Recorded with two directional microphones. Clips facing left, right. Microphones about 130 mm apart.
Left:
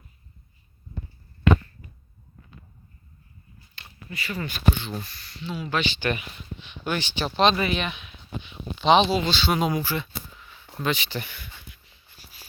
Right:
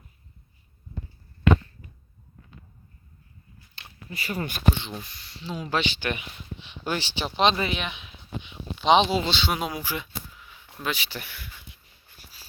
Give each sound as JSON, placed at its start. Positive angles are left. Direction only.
{"t": 4.1, "sound": "speech", "side_deg": -40}
{"t": 4.7, "sound": "speech", "side_deg": -20}
{"t": 5.4, "sound": "speech", "side_deg": -30}
{"t": 5.8, "sound": "speech", "side_deg": -10}
{"t": 6.7, "sound": "speech", "side_deg": -30}
{"t": 8.8, "sound": "speech", "side_deg": -15}
{"t": 9.5, "sound": "speech", "side_deg": -5}